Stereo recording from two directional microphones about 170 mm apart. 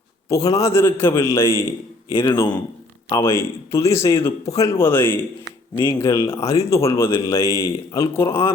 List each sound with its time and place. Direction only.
0.3 s a man's voice: 20° left (ahead or behind)